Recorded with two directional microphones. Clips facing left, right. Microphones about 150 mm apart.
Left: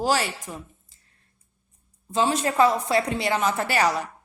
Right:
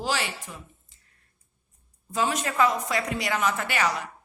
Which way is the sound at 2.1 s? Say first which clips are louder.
Left 4 dB; 30° left (ahead or behind).